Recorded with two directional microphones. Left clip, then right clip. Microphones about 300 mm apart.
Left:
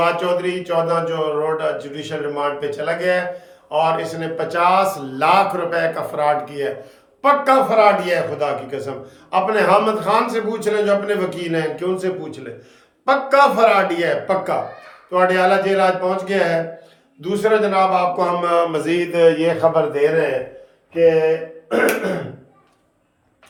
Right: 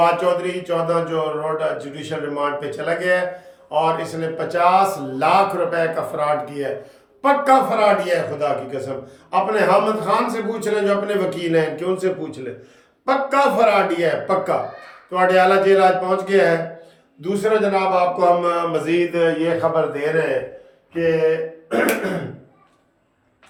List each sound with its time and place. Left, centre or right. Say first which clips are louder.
0.0 s speech: right 1 dB; centre; by 20.0 s left